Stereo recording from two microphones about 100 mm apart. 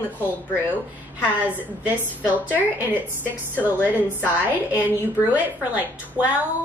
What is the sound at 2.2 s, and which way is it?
A woman's voice, 15° right (ahead or behind).